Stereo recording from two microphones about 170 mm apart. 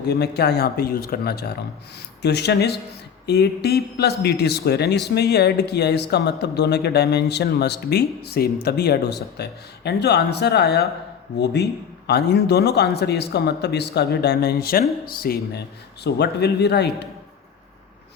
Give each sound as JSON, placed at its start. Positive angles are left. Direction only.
{"t": 0.1, "sound": "speech", "side_deg": 75}
{"t": 2.2, "sound": "a man's voice", "side_deg": 80}
{"t": 16.0, "sound": "a man's voice", "side_deg": 80}